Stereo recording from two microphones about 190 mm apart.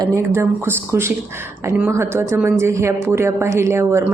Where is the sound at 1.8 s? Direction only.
15° right (ahead or behind).